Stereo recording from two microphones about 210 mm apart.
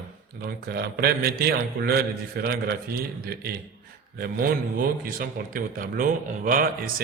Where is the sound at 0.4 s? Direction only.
50° right (ahead or behind).